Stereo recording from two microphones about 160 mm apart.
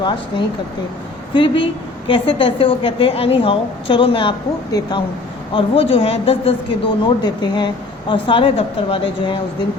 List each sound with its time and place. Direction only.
1.3 s a woman's voice: 30° left (ahead or behind)